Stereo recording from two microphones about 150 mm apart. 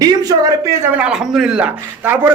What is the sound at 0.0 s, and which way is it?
A man's voice, 25° right (ahead or behind).